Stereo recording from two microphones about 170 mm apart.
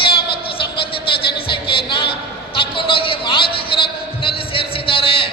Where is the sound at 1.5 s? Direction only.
30° left (ahead or behind).